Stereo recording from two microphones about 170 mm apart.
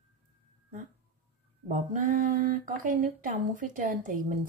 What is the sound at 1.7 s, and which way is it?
A woman's voice, 50° right (ahead or behind).